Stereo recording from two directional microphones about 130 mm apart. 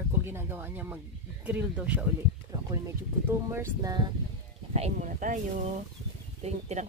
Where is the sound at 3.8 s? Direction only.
35° right (ahead or behind).